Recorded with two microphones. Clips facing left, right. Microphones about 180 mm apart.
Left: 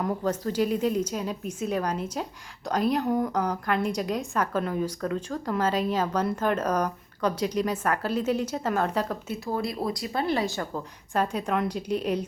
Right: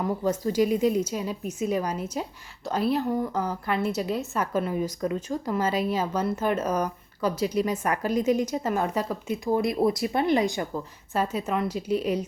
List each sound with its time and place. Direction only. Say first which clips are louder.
0.0 s a woman's voice: right 1 dB; 10° right (ahead or behind)